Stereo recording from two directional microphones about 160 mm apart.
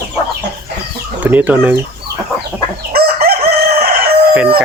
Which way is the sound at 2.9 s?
75° right (ahead or behind).